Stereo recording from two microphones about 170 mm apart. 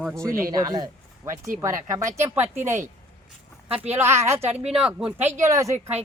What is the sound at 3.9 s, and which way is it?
A woman's voice, 15° right (ahead or behind).